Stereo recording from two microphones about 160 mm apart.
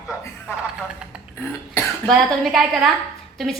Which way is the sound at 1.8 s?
15° left (ahead or behind).